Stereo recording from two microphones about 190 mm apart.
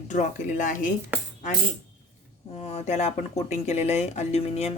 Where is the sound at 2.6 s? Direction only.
35° left (ahead or behind).